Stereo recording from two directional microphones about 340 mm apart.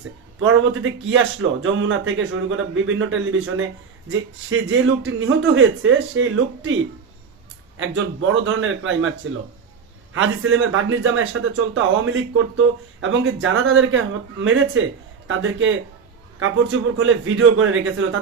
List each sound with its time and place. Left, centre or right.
0.3 s speech: right
7.8 s speech: right
17.0 s speech: right